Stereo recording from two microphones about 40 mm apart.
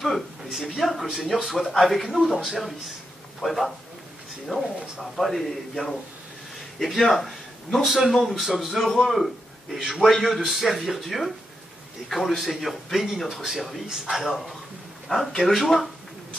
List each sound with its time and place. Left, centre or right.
0.7 s speech: centre
7.0 s a man's voice: centre
13.8 s speech: centre
14.1 s speech: centre